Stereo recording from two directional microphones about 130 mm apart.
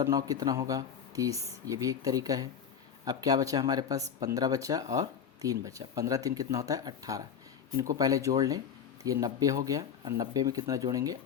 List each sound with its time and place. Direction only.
0.0 s speech: 25° right (ahead or behind)